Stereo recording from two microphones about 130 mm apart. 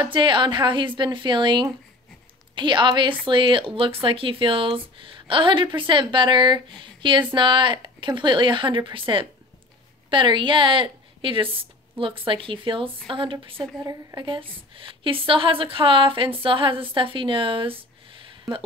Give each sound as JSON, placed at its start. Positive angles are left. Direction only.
{"t": 0.0, "sound": "a woman's voice", "side_deg": -40}
{"t": 13.7, "sound": "a woman's voice", "side_deg": -25}
{"t": 14.2, "sound": "speech", "side_deg": -40}